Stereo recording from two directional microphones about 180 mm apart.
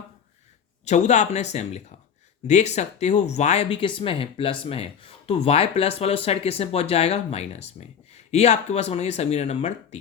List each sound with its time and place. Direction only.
0.9 s speech: 40° left (ahead or behind)